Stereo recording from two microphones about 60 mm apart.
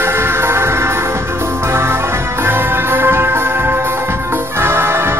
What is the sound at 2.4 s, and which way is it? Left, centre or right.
Music, right.